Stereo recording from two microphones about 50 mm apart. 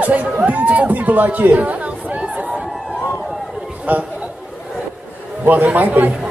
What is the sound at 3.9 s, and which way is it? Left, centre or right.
Speech, right.